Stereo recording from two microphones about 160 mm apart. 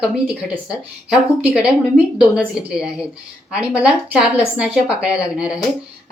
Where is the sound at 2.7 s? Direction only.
5° right (ahead or behind).